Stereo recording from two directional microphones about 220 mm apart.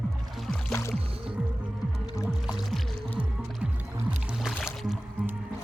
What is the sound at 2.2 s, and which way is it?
Music, 20° left (ahead or behind).